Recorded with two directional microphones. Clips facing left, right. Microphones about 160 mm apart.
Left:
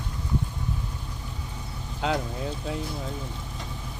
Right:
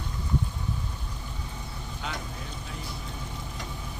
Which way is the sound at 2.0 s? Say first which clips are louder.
Left 11 dB; 90° left.